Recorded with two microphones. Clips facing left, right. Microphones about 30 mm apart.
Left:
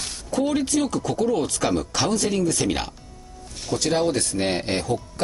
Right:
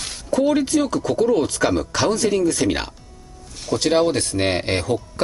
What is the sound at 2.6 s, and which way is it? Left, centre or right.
Speech, right.